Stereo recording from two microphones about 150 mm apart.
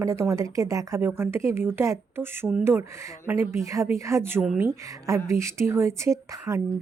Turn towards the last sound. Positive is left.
turn(degrees=-20)  # may be behind; listen again after turning